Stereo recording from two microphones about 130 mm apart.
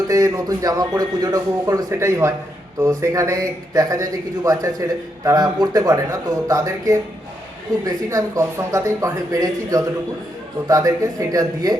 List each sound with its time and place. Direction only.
0.1 s speech: 25° right (ahead or behind)